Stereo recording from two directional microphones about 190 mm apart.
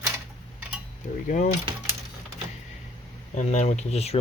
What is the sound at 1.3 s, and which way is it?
Speech, 40° left (ahead or behind).